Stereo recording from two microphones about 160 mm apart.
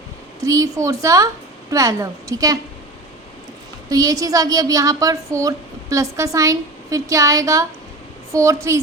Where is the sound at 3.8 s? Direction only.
25° right (ahead or behind).